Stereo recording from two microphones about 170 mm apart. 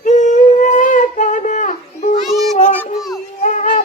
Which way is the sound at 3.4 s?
45° left (ahead or behind).